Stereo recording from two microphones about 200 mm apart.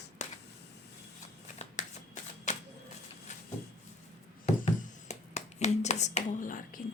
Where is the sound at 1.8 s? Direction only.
35° left (ahead or behind).